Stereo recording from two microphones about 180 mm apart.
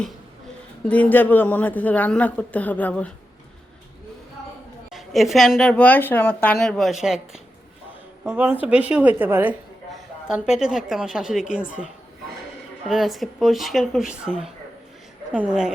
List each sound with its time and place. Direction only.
0.9 s a woman's voice: 10° left (ahead or behind)
4.9 s a woman's voice: centre (ahead or behind)
12.9 s a woman's voice: centre (ahead or behind)